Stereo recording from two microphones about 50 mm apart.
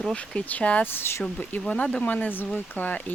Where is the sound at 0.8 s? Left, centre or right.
Left.